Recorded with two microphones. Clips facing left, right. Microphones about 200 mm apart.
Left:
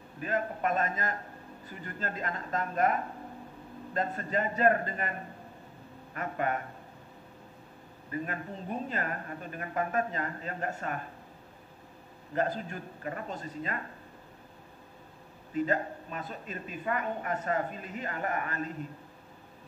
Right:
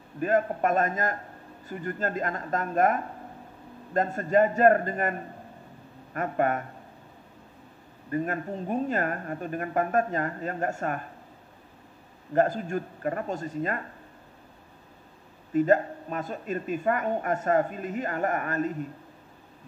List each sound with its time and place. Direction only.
0.2 s a woman's voice: 45° right (ahead or behind)
6.1 s a woman's voice: 45° right (ahead or behind)
8.1 s a woman's voice: 45° right (ahead or behind)
12.4 s a woman's voice: 45° right (ahead or behind)
15.5 s a woman's voice: 45° right (ahead or behind)